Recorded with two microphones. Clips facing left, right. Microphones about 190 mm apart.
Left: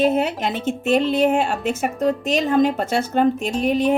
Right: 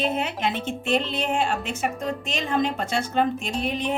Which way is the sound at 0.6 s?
5° left (ahead or behind).